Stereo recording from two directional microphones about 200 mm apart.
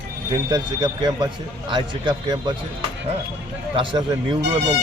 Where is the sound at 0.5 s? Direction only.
20° right (ahead or behind).